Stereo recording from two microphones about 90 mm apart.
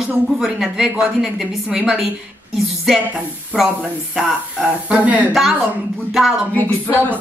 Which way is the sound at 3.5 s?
5° right (ahead or behind).